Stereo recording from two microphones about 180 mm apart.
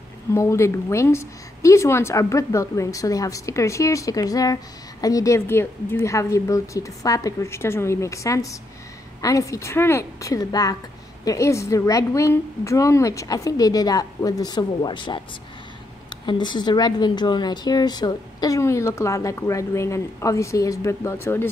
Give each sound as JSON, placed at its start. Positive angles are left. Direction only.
{"t": 0.3, "sound": "a woman's voice", "side_deg": 15}
{"t": 16.3, "sound": "a woman's voice", "side_deg": 25}